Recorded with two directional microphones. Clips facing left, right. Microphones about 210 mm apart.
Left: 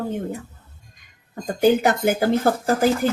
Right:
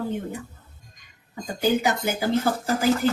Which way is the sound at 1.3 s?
55° left (ahead or behind).